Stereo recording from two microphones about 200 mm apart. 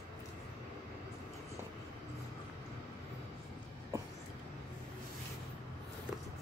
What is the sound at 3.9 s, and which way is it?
Train, 15° right (ahead or behind).